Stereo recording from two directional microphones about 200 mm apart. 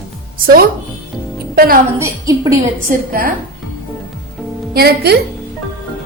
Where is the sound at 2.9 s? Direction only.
45° right (ahead or behind).